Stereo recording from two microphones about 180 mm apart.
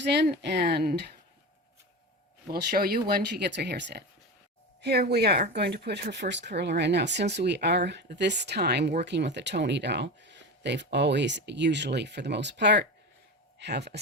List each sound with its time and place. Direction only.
0.0 s speech: 70° right (ahead or behind)
2.5 s speech: 55° right (ahead or behind)